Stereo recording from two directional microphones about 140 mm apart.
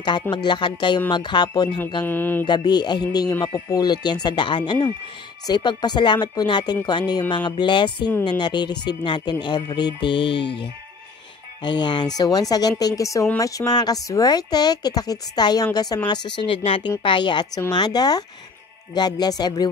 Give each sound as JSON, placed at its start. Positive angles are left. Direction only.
{"t": 0.3, "sound": "speech", "side_deg": 30}
{"t": 2.0, "sound": "mantra", "side_deg": 15}
{"t": 2.4, "sound": "speech", "side_deg": 30}
{"t": 11.6, "sound": "a woman's voice", "side_deg": 35}